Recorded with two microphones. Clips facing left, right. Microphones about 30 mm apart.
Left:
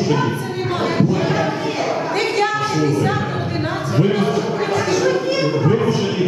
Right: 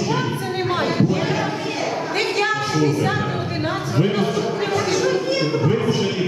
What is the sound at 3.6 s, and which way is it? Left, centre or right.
Speech, centre.